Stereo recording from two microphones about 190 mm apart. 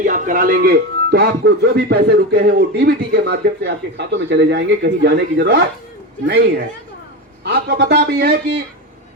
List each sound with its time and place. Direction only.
0.0 s speech: 45° right (ahead or behind)